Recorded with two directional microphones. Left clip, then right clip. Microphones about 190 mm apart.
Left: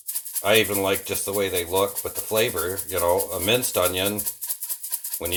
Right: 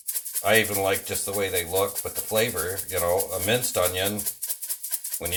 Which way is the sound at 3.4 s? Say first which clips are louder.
Left 2 dB; 35° left (ahead or behind).